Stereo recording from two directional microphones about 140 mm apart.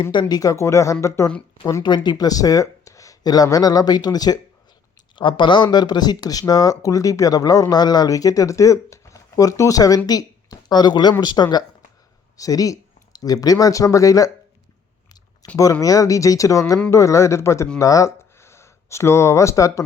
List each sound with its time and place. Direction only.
0.0 s speech: 35° left (ahead or behind)
15.5 s speech: 25° left (ahead or behind)